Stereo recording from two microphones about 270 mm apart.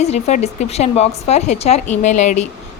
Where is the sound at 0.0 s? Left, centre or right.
Left.